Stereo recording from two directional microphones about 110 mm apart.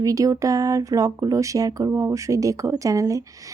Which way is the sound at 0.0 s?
30° right (ahead or behind).